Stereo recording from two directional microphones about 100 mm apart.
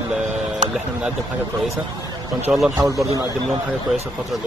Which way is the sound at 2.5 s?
10° right (ahead or behind).